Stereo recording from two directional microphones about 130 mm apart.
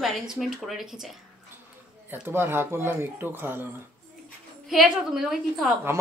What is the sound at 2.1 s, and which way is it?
Speech, 15° right (ahead or behind).